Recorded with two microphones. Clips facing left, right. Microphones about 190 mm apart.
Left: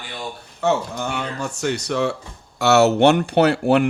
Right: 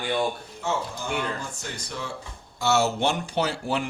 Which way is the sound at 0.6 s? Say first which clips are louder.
Left 8 dB; 70° left (ahead or behind).